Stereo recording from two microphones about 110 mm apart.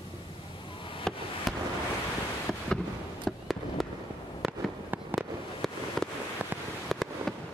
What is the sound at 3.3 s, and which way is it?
Fireworks, centre (ahead or behind).